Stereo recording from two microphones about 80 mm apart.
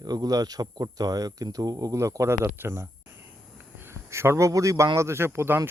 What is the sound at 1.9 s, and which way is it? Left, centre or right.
Speech, right.